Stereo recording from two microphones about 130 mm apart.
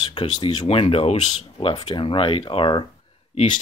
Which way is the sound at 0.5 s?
50° left (ahead or behind).